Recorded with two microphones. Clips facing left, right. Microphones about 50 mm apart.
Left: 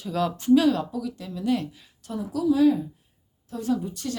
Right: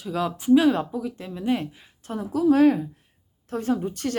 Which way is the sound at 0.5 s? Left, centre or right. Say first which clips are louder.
Right 3 dB; right.